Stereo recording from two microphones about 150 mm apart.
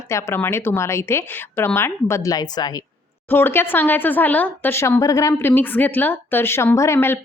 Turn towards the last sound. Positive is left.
turn(degrees=15)  # may be behind; listen again after turning